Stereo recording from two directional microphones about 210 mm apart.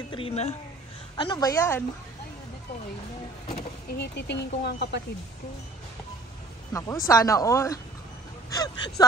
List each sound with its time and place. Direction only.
0.1 s a woman's voice: 30° left (ahead or behind)
1.1 s a woman's voice: 20° left (ahead or behind)
3.9 s speech: 50° left (ahead or behind)
6.7 s a woman's voice: 15° left (ahead or behind)